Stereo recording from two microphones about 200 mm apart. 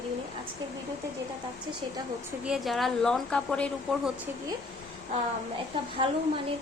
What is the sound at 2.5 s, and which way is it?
A woman's voice, centre (ahead or behind).